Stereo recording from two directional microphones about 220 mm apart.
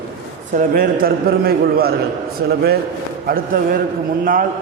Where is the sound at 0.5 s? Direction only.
40° right (ahead or behind).